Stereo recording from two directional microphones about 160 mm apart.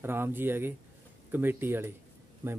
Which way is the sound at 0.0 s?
15° right (ahead or behind).